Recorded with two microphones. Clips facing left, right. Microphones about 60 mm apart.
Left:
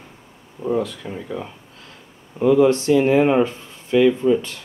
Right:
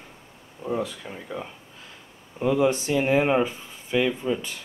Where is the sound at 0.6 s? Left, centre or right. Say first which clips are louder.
Left 6 dB; centre.